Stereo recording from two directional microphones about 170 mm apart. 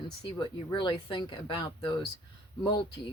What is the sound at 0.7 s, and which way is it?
Speech, 25° left (ahead or behind).